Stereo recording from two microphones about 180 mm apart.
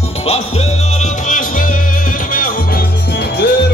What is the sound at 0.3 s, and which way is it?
Music, 35° left (ahead or behind).